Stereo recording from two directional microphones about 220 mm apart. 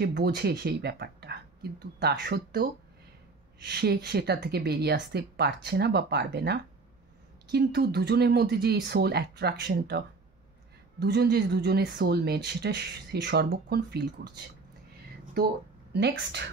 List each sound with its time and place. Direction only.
0.0 s speech: 45° right (ahead or behind)
15.9 s speech: 50° right (ahead or behind)